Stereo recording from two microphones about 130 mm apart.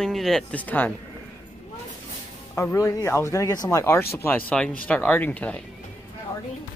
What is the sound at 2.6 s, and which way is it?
Speech, 20° left (ahead or behind).